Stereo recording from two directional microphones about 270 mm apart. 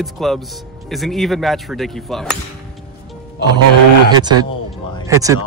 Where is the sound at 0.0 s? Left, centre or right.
Centre.